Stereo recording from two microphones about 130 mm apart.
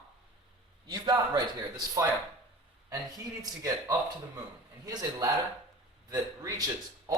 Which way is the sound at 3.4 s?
25° right (ahead or behind).